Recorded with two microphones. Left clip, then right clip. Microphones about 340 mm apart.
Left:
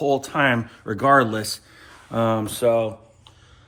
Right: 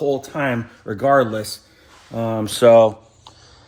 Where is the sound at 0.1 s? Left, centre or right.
Centre.